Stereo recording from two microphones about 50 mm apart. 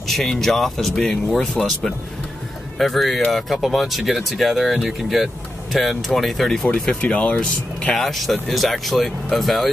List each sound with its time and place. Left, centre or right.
0.1 s speech: centre
2.8 s speech: centre
6.7 s speech: left
7.9 s speech: centre